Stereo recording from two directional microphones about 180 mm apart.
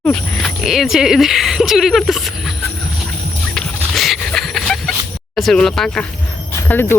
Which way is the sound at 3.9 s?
Centre (ahead or behind).